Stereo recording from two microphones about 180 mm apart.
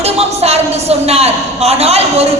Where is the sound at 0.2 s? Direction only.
35° right (ahead or behind).